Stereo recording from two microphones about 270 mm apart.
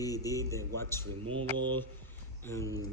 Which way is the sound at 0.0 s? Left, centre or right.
Centre.